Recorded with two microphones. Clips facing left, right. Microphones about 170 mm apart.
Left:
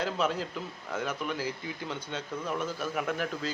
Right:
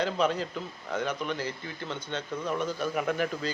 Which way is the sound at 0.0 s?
5° left (ahead or behind).